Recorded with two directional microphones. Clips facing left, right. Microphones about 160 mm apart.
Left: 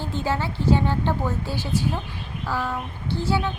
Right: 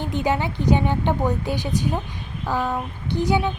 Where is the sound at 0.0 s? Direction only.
15° right (ahead or behind).